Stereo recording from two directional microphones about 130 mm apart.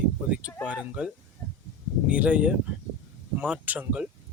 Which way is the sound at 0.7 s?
10° right (ahead or behind).